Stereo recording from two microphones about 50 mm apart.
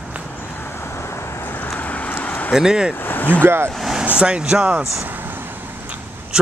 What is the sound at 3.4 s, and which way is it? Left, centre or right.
Speech, right.